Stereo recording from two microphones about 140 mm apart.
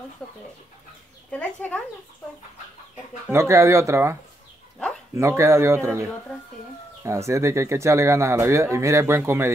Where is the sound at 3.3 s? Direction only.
20° right (ahead or behind).